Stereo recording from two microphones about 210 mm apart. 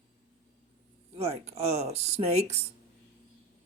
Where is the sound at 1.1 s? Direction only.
30° right (ahead or behind).